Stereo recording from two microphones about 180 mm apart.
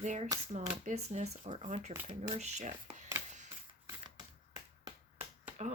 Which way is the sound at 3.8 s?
20° right (ahead or behind).